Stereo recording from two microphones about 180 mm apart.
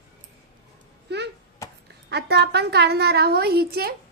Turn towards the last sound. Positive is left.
turn(degrees=-60)  # may be behind; listen again after turning